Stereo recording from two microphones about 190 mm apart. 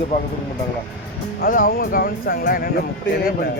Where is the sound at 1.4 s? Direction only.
45° left (ahead or behind).